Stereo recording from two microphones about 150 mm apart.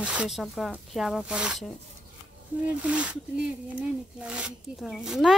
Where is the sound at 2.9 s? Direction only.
10° right (ahead or behind).